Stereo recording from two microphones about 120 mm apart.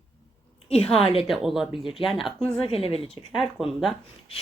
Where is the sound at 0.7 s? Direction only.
55° left (ahead or behind).